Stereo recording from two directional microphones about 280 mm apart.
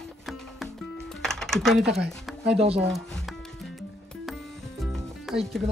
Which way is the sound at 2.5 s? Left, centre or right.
Right.